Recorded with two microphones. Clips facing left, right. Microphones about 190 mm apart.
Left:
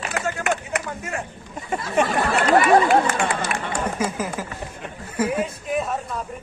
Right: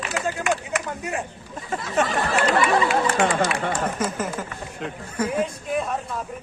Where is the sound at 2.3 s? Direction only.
55° left (ahead or behind).